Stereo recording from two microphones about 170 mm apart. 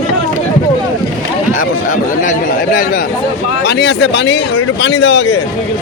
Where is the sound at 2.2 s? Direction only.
55° left (ahead or behind).